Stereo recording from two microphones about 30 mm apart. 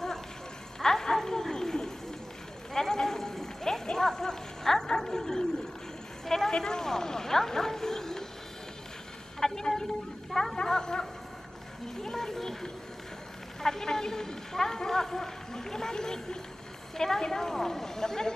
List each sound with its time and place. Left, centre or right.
0.7 s music: centre
1.1 s a sound: centre
6.5 s speech: left
9.4 s a sound: centre
10.5 s dog: left
12.0 s music: centre
13.6 s a woman's voice: centre